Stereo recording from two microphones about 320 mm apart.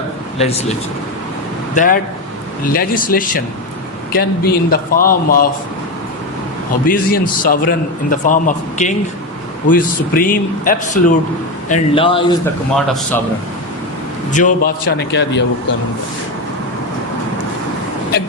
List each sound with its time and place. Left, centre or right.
0.3 s a man's voice: centre
1.7 s a man's voice: left
6.8 s a man's voice: left
12.7 s a man's voice: centre
14.3 s a man's voice: left